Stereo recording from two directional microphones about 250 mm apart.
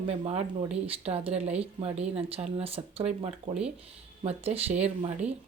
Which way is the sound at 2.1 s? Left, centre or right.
Right.